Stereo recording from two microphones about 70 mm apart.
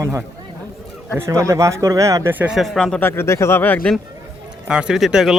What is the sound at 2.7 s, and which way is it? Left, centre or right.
Speech, centre.